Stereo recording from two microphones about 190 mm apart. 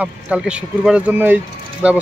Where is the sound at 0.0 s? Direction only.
5° right (ahead or behind).